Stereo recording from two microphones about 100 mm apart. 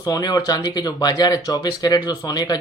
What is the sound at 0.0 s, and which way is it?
Speech, 40° left (ahead or behind).